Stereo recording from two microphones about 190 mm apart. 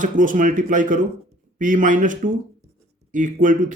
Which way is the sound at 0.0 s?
45° right (ahead or behind).